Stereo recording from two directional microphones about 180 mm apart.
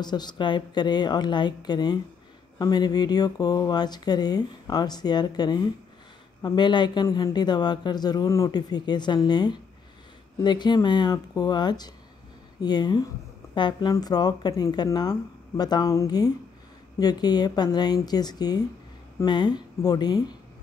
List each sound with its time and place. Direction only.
0.0 s speech: 25° left (ahead or behind)